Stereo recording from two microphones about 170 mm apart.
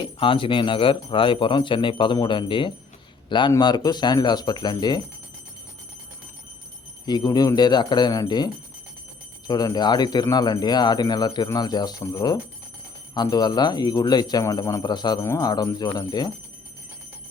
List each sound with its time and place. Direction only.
0.0 s a man's voice: 30° left (ahead or behind)
7.0 s speech: 25° left (ahead or behind)
9.5 s speech: 25° left (ahead or behind)